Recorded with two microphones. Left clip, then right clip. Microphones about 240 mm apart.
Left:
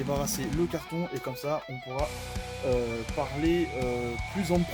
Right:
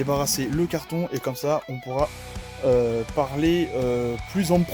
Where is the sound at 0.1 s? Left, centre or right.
Right.